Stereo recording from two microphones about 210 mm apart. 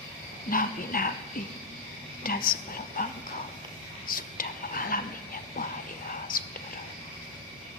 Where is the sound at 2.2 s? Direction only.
45° left (ahead or behind).